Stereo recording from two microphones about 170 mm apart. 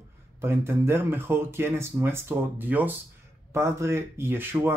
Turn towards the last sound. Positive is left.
turn(degrees=-15)  # may be behind; listen again after turning